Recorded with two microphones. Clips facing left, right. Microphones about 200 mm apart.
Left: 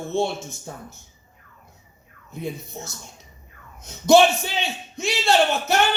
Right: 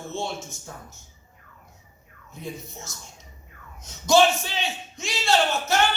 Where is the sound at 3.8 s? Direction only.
60° left (ahead or behind).